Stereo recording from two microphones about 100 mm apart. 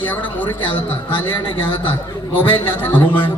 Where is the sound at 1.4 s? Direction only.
60° left (ahead or behind).